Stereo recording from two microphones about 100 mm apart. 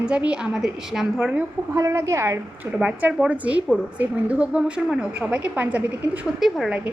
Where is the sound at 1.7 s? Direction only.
30° right (ahead or behind).